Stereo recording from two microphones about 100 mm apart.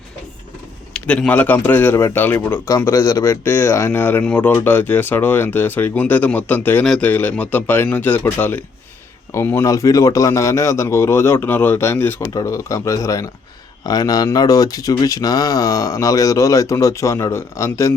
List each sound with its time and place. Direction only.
0.9 s a man's voice: 10° left (ahead or behind)
12.2 s speech: 35° left (ahead or behind)